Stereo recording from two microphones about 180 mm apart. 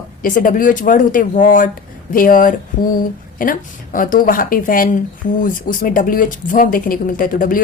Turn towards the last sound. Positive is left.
turn(degrees=50)  # may be behind; listen again after turning